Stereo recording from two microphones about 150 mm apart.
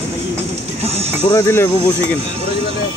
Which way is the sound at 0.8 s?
45° right (ahead or behind).